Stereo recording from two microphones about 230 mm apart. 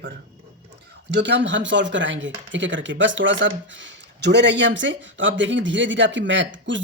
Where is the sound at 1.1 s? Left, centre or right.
Right.